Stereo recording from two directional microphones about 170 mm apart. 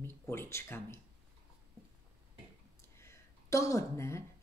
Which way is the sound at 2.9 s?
15° left (ahead or behind).